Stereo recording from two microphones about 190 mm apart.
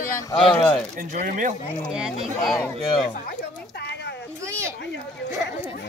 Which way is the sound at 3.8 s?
60° left (ahead or behind).